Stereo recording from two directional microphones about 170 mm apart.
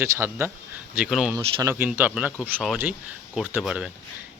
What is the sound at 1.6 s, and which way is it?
Speech, 15° right (ahead or behind).